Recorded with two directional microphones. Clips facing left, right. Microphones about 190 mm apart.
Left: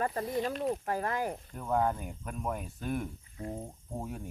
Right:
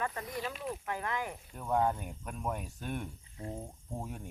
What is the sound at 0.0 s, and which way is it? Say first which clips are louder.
Speech: left 6 dB; 35° left (ahead or behind).